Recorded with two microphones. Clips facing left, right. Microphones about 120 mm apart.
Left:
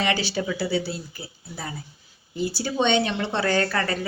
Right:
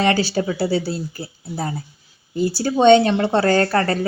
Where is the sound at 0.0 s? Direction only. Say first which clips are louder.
Right 6 dB; 40° right (ahead or behind).